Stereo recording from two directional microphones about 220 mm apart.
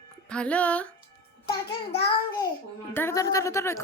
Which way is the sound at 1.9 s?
25° left (ahead or behind).